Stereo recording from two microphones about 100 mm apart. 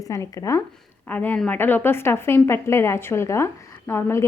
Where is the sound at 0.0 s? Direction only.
35° left (ahead or behind).